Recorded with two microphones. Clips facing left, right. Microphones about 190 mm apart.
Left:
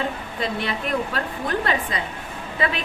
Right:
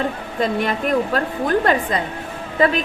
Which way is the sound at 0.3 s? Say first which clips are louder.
Right 7 dB; 45° right (ahead or behind).